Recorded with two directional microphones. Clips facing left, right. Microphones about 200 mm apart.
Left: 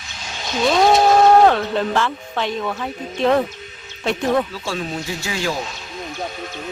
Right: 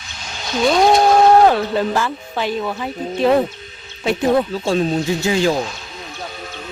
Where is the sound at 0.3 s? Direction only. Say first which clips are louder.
Right 2 dB; centre (ahead or behind).